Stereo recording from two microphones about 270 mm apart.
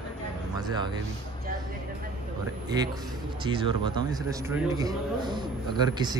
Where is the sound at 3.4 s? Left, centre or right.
Centre.